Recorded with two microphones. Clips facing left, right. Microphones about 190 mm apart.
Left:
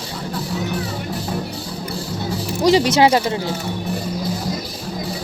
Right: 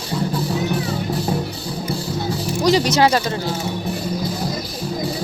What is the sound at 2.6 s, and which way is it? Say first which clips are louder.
Speech: left 2 dB; 25° left (ahead or behind).